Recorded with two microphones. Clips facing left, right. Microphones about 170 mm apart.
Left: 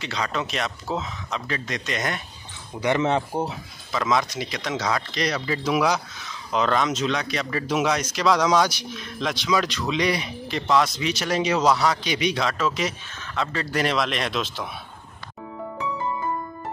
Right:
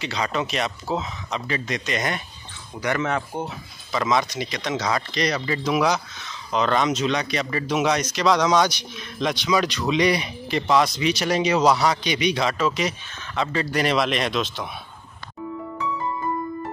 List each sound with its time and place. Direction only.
0.0 s speech: 5° right (ahead or behind)
2.8 s speech: 20° left (ahead or behind)
3.9 s speech: centre (ahead or behind)